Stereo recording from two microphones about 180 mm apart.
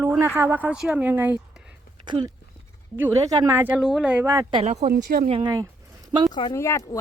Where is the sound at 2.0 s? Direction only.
25° right (ahead or behind).